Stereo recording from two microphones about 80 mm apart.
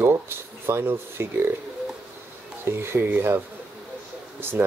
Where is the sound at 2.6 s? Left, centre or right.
Right.